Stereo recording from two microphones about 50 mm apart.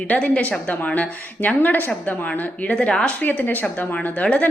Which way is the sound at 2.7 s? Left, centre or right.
Left.